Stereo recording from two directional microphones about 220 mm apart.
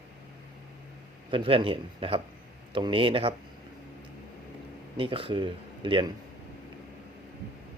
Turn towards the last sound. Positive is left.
turn(degrees=-20)  # may be behind; listen again after turning